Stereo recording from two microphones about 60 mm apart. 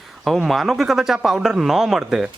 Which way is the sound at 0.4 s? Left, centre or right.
Centre.